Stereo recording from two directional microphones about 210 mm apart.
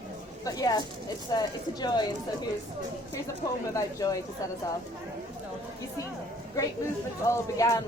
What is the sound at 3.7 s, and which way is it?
Speech, 15° left (ahead or behind).